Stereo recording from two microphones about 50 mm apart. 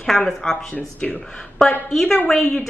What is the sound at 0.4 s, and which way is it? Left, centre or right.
Speech, centre.